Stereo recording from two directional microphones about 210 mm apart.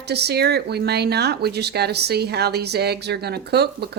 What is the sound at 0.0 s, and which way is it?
Speech, 50° right (ahead or behind).